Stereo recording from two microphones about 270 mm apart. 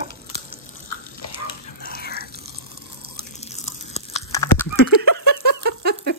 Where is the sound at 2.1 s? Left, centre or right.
Right.